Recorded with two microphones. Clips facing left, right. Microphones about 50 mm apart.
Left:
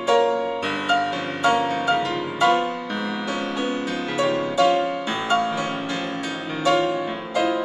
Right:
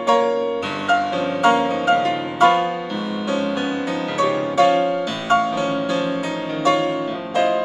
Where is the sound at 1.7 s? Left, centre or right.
Right.